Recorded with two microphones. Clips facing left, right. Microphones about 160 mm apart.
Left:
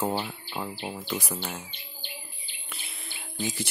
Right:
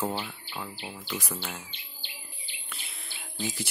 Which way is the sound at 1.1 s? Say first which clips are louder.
Left 1 dB; 10° left (ahead or behind).